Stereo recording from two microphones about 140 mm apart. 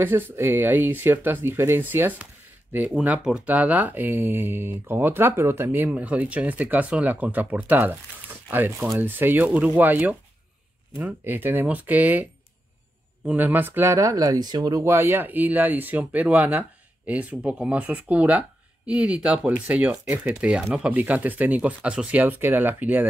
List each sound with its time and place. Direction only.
0.0 s speech: 15° right (ahead or behind)